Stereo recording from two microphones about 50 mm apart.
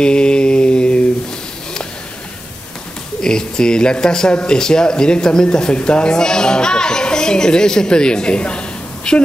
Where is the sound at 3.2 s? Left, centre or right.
Centre.